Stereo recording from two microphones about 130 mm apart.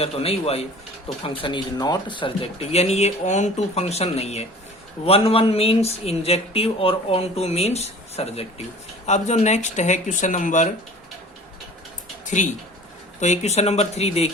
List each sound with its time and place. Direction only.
0.0 s speech: 50° left (ahead or behind); by 10.7 s 70° left (ahead or behind)
12.2 s a sound: 70° left (ahead or behind)
13.1 s speech: 60° left (ahead or behind)